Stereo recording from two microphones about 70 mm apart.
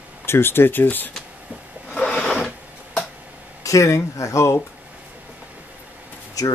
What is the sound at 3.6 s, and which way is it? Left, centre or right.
Speech, left.